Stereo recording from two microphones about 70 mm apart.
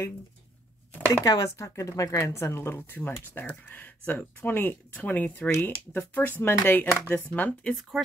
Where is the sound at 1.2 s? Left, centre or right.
Left.